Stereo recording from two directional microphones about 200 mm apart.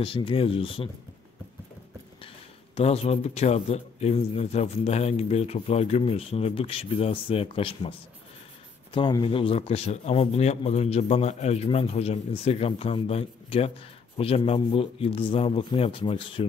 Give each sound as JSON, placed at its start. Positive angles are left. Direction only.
{"t": 0.0, "sound": "speech", "side_deg": 25}
{"t": 2.2, "sound": "speech", "side_deg": 30}
{"t": 8.9, "sound": "speech", "side_deg": 25}